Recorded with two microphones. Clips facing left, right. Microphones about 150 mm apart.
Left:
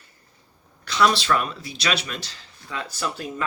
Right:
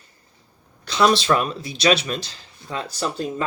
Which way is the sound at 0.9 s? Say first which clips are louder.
Right 3 dB; 25° right (ahead or behind).